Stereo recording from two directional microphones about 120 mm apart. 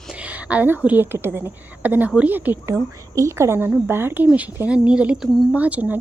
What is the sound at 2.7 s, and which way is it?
A woman's voice, 25° right (ahead or behind).